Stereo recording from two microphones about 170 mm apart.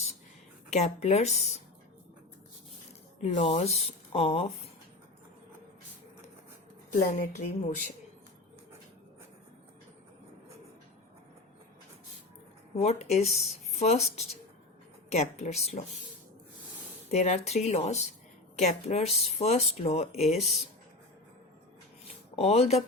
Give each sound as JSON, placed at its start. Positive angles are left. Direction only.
{"t": 0.7, "sound": "speech", "side_deg": 40}
{"t": 3.2, "sound": "speech", "side_deg": 45}
{"t": 6.9, "sound": "a woman's voice", "side_deg": 50}
{"t": 12.7, "sound": "a woman's voice", "side_deg": 40}
{"t": 17.1, "sound": "speech", "side_deg": 40}
{"t": 22.4, "sound": "speech", "side_deg": 40}